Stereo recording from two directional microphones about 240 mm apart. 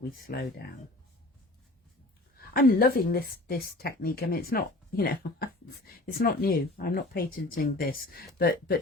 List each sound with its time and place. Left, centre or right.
0.3 s speech: left
2.5 s speech: left